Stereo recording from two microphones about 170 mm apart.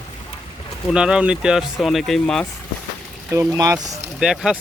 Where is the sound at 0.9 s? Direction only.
5° right (ahead or behind).